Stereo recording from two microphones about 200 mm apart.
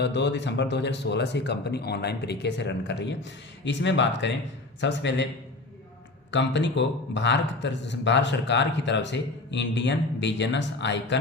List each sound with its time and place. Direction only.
0.0 s speech: 60° left (ahead or behind)
6.3 s speech: 60° left (ahead or behind)